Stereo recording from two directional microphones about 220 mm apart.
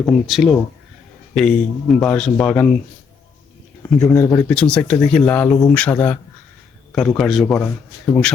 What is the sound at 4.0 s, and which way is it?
Speech, 15° left (ahead or behind).